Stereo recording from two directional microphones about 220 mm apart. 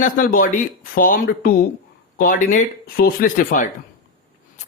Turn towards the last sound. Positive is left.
turn(degrees=35)  # may be behind; listen again after turning